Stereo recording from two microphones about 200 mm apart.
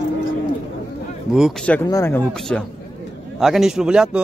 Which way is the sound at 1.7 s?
10° left (ahead or behind).